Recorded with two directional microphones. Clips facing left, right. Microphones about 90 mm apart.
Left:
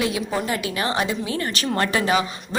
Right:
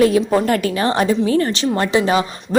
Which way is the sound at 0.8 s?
40° right (ahead or behind).